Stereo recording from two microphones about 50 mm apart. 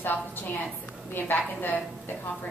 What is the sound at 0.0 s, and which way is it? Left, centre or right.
A woman's voice, left.